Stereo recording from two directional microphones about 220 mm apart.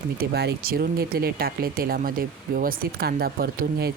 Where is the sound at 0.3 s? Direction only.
45° right (ahead or behind).